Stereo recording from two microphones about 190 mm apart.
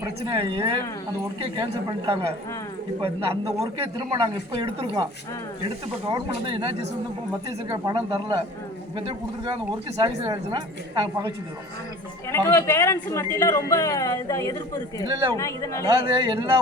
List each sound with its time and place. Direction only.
0.3 s a woman's voice: 30° right (ahead or behind)
6.1 s a woman's voice: 25° right (ahead or behind)
7.7 s a woman's voice: 20° right (ahead or behind)
10.0 s a woman's voice: 25° right (ahead or behind)
12.5 s speech: 15° left (ahead or behind)
15.0 s a woman's voice: 25° right (ahead or behind)
15.4 s speech: 15° left (ahead or behind)
15.9 s a woman's voice: 20° right (ahead or behind)